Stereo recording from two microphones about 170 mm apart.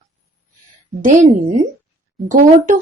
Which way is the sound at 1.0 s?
50° right (ahead or behind).